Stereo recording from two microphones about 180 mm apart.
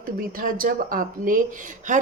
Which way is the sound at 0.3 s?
50° right (ahead or behind).